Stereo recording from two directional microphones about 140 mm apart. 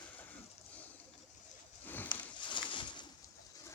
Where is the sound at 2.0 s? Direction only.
35° left (ahead or behind).